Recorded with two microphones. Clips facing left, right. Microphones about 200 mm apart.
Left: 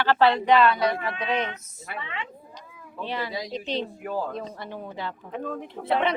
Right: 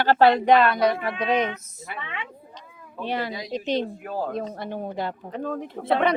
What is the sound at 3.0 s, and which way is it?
A woman's voice, 50° right (ahead or behind).